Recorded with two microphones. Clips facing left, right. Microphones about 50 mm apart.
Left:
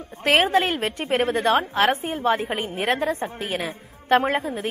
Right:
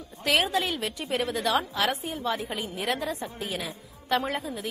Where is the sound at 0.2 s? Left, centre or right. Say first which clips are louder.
Left 6 dB; left.